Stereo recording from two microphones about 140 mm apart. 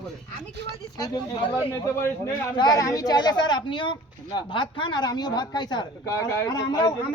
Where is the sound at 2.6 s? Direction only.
25° left (ahead or behind).